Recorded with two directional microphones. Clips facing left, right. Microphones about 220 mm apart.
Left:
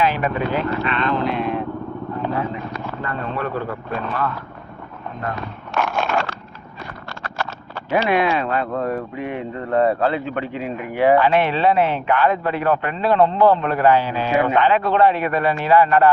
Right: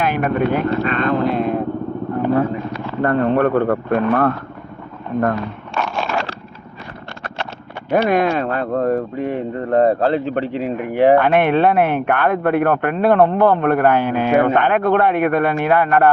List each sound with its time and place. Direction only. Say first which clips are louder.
0.0 s vehicle: right 3 dB; 50° right (ahead or behind)
3.0 s speech: right 12 dB; 60° right (ahead or behind)
5.7 s a sound: left 1 dB; 5° left (ahead or behind)
7.9 s speech: right 3 dB; 55° right (ahead or behind)